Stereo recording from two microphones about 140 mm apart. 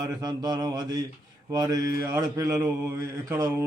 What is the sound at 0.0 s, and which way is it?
Speech, 25° right (ahead or behind).